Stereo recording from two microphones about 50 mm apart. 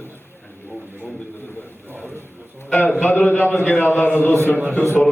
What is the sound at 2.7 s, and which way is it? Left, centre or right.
A man's voice, left.